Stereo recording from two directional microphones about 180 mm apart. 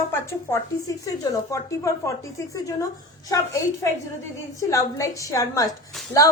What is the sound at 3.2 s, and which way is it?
Speech, 20° left (ahead or behind).